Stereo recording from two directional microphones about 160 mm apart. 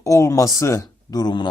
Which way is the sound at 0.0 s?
20° left (ahead or behind).